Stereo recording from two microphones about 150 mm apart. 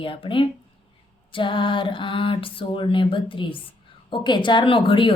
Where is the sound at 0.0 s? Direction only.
35° left (ahead or behind).